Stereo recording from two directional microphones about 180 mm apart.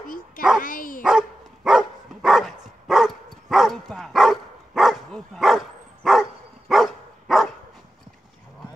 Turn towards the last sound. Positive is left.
turn(degrees=0)  # may be behind; listen again after turning